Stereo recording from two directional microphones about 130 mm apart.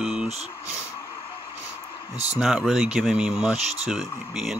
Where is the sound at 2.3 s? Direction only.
5° right (ahead or behind).